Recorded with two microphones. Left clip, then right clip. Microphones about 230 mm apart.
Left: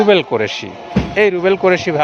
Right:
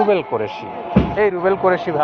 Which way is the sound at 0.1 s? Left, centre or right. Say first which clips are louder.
Left 5 dB; left.